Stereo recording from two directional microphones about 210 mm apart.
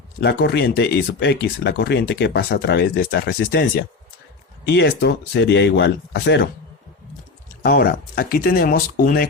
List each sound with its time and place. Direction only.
0.2 s speech: 50° left (ahead or behind)
7.6 s speech: 45° left (ahead or behind)